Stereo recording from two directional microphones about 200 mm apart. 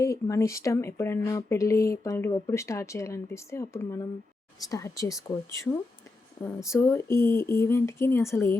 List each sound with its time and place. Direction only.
0.0 s speech: 15° left (ahead or behind)
6.4 s speech: 15° left (ahead or behind)